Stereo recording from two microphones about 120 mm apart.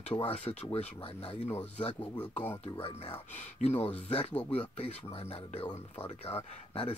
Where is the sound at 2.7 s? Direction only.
50° left (ahead or behind).